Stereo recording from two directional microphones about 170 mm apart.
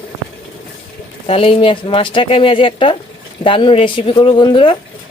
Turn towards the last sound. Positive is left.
turn(degrees=30)  # may be behind; listen again after turning